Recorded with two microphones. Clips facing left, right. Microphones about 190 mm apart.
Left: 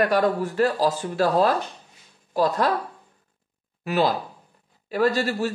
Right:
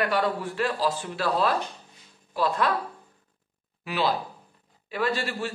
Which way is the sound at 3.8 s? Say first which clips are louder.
Left 4 dB; 45° left (ahead or behind).